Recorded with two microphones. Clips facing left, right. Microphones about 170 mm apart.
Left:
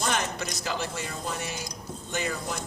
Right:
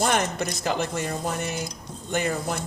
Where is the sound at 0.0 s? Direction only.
55° right (ahead or behind).